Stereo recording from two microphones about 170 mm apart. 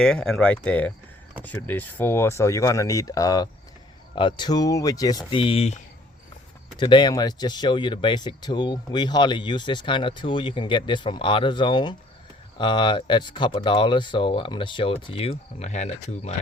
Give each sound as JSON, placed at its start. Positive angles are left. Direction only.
{"t": 0.0, "sound": "speech", "side_deg": 5}
{"t": 6.7, "sound": "speech", "side_deg": 25}